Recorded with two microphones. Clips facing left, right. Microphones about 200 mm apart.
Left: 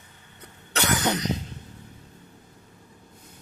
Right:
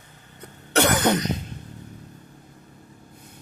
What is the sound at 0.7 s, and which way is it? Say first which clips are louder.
Cough: right 6 dB; 55° right (ahead or behind).